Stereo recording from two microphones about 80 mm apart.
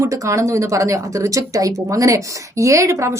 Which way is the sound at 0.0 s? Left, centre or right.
Right.